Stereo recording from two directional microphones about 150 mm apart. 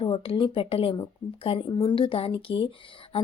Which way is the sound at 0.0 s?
35° left (ahead or behind).